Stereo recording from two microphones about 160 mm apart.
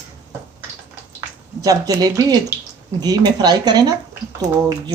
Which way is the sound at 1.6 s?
20° right (ahead or behind).